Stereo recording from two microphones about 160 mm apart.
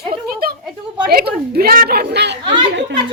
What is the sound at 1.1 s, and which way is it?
A woman's voice, 75° right (ahead or behind).